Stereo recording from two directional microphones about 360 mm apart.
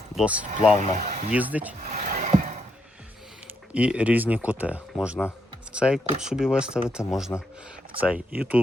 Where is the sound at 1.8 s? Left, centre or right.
Right.